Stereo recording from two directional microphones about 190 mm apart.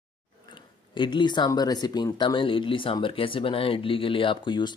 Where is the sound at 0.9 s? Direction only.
25° left (ahead or behind).